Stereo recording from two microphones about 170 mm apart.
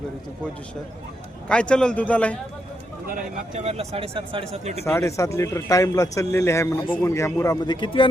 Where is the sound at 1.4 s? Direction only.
5° left (ahead or behind).